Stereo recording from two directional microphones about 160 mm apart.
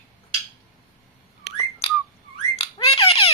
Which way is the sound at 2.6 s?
35° left (ahead or behind).